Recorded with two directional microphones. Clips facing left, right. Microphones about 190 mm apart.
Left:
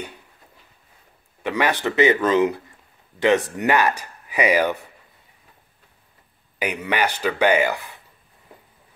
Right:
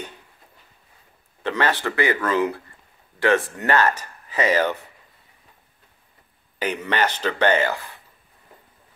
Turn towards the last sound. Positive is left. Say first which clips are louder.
# left 1 dB
turn(degrees=15)  # may be behind; listen again after turning